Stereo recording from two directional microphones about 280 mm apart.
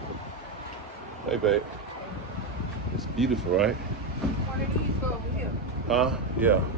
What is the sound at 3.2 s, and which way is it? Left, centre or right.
Speech, centre.